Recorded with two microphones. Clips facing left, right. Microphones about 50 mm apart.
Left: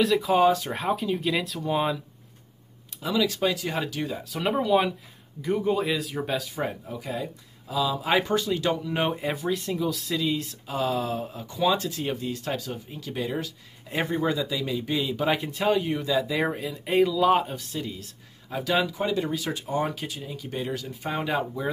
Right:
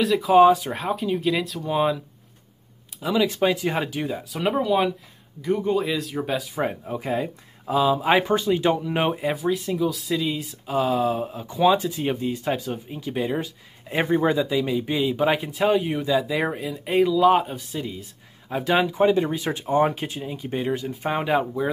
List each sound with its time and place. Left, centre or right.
0.0 s speech: centre
0.7 s speech: centre
3.2 s speech: right
4.3 s speech: centre
6.7 s speech: right
8.1 s speech: centre
9.0 s speech: centre; by 14.7 s right
14.7 s speech: centre
18.5 s speech: right